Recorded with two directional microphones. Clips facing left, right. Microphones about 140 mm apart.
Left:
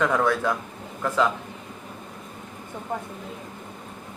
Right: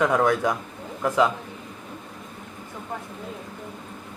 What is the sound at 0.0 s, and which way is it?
Speech, 15° right (ahead or behind).